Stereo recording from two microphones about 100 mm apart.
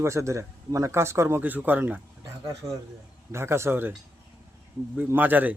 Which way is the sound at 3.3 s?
25° right (ahead or behind).